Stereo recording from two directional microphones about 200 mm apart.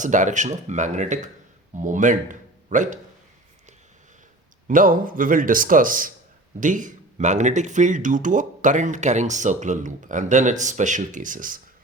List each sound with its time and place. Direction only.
0.0 s a man's voice: 40° right (ahead or behind)
4.7 s speech: 45° right (ahead or behind)